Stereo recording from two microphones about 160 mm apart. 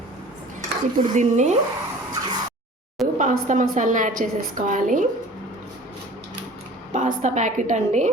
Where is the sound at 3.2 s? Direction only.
50° right (ahead or behind).